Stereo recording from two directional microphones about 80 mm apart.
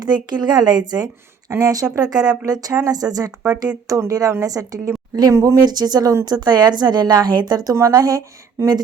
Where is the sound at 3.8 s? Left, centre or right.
Right.